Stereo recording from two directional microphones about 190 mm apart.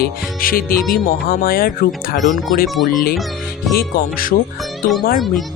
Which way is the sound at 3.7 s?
50° left (ahead or behind).